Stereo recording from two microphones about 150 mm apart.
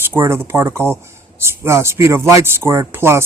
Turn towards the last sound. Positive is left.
turn(degrees=-15)  # may be behind; listen again after turning